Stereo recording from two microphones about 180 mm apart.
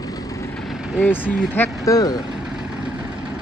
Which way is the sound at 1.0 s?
10° left (ahead or behind).